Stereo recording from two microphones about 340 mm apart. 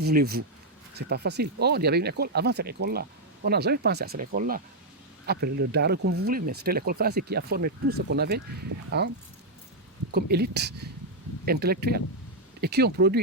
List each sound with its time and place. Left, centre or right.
0.0 s speech: right
10.1 s speech: right